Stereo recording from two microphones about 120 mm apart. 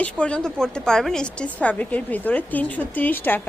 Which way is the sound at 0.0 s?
10° left (ahead or behind).